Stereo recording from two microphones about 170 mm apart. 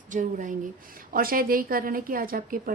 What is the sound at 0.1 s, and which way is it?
A woman's voice, 50° right (ahead or behind).